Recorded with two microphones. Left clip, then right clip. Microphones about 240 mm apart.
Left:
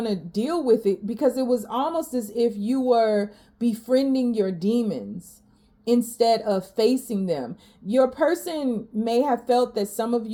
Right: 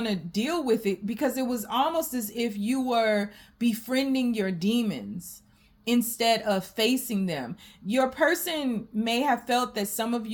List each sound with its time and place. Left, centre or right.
0.0 s speech: right